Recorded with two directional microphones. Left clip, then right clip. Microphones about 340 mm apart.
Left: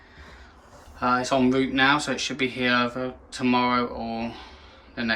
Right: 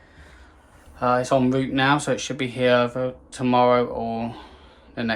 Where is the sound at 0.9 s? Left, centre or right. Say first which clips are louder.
Right 3 dB; centre.